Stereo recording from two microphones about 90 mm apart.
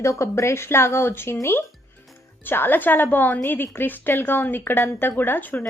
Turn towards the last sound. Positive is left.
turn(degrees=20)  # may be behind; listen again after turning